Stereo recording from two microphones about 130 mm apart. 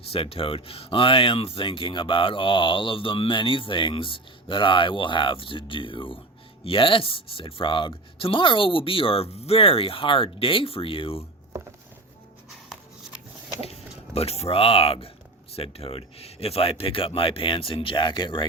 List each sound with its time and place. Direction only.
0.1 s speech: 45° left (ahead or behind)
13.6 s speech: 50° left (ahead or behind)